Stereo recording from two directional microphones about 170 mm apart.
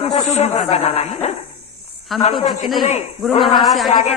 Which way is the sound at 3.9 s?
45° left (ahead or behind).